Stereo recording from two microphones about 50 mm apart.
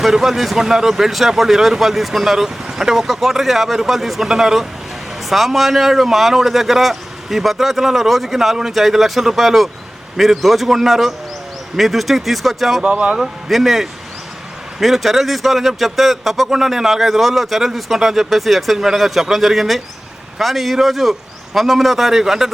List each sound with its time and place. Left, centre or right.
0.0 s speech: centre
12.8 s speech: right
13.1 s speech: centre